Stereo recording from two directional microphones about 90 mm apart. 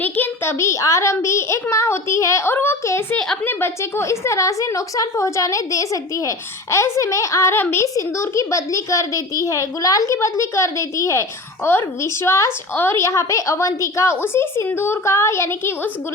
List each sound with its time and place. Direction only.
0.0 s a child's voice: 20° left (ahead or behind)
0.6 s a woman's voice: 35° left (ahead or behind)